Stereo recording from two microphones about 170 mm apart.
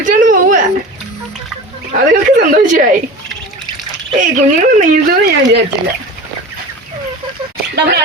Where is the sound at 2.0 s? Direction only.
50° right (ahead or behind).